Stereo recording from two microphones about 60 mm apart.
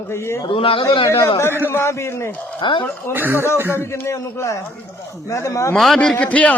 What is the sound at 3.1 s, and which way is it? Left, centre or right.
Speech, right.